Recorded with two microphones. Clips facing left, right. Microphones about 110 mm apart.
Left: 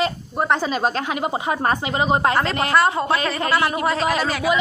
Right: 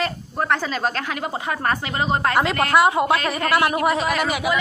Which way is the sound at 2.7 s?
15° right (ahead or behind).